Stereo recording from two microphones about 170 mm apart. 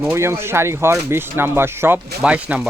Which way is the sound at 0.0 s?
15° right (ahead or behind).